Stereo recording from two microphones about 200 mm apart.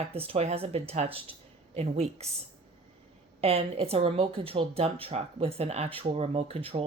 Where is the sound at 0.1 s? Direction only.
30° right (ahead or behind).